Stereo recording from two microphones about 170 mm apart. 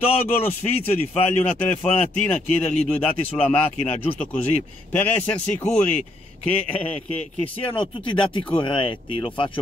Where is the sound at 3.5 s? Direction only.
35° left (ahead or behind).